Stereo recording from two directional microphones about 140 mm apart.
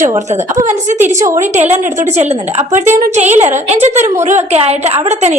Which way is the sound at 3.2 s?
55° right (ahead or behind).